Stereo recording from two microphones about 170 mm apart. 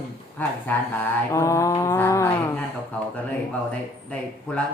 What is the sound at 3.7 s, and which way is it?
Speech, 5° left (ahead or behind).